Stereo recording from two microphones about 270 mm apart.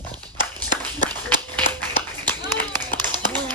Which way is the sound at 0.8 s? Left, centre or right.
Centre.